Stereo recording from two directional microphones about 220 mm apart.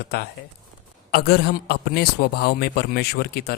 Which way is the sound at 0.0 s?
45° left (ahead or behind).